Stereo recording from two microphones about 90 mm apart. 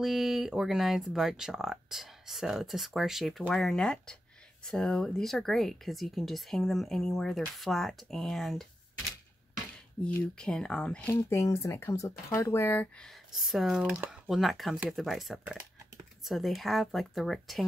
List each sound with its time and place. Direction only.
0.0 s speech: centre (ahead or behind)
10.0 s speech: 10° left (ahead or behind)
11.1 s speech: 30° left (ahead or behind)
12.5 s speech: 20° left (ahead or behind)
13.3 s speech: centre (ahead or behind)
13.9 s speech: 20° right (ahead or behind)
14.3 s speech: centre (ahead or behind)